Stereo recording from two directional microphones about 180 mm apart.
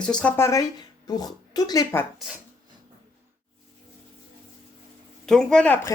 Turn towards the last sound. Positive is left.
turn(degrees=10)  # may be behind; listen again after turning